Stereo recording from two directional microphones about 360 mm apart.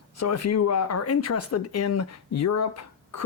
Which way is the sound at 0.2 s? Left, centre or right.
Left.